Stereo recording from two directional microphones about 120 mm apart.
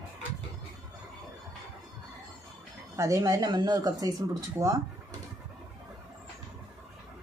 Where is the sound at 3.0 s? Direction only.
30° right (ahead or behind).